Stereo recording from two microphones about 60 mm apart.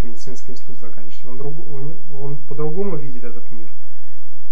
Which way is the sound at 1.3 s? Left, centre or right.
Centre.